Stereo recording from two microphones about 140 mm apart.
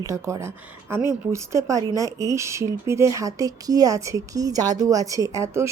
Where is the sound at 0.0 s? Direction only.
20° right (ahead or behind).